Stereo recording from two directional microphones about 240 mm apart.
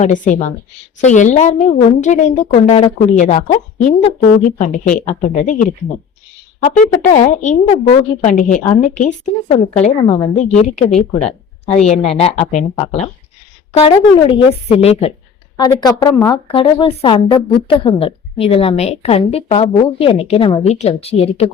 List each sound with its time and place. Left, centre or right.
0.0 s a woman's voice: left